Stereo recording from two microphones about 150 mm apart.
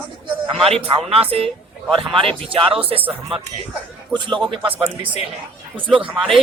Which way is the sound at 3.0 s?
10° right (ahead or behind).